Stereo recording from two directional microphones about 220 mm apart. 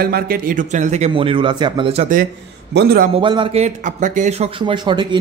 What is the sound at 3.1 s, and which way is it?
A man's voice, 25° right (ahead or behind).